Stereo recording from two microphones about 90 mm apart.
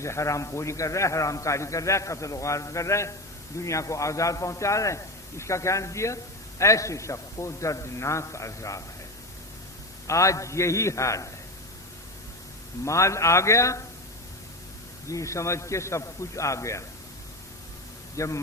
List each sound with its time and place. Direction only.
0.0 s a man's voice: 35° left (ahead or behind)
10.1 s a man's voice: 35° left (ahead or behind)
12.8 s a man's voice: 35° left (ahead or behind)
15.1 s a man's voice: 35° left (ahead or behind)
18.2 s a man's voice: 35° left (ahead or behind)